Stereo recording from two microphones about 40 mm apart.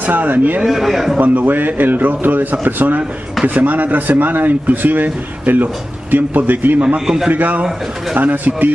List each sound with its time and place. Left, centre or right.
0.0 s a man's voice: right
0.7 s a man's voice: centre
1.2 s a man's voice: right